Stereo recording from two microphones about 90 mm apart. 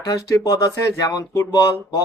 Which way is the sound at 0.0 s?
40° left (ahead or behind).